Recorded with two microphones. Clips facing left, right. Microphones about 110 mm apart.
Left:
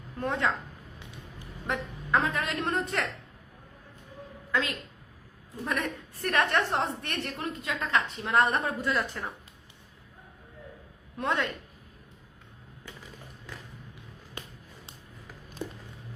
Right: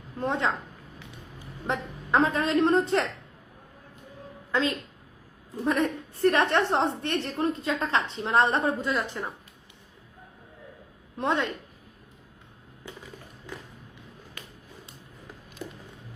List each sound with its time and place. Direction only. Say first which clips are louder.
0.2 s a woman's voice: right 2 dB; 20° right (ahead or behind)
1.6 s a woman's voice: right 3 dB; 25° right (ahead or behind)
4.5 s a woman's voice: right 4 dB; 30° right (ahead or behind)
11.2 s a woman's voice: right 3 dB; 25° right (ahead or behind)